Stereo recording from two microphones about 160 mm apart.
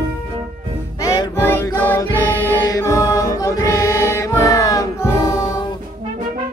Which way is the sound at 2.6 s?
20° left (ahead or behind).